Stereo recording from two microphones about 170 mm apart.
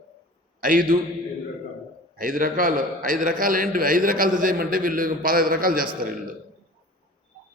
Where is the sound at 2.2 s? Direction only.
55° right (ahead or behind).